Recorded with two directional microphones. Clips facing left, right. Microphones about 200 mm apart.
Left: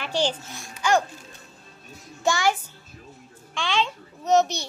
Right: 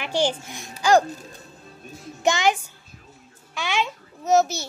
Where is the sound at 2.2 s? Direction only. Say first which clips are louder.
Right 2 dB; 20° right (ahead or behind).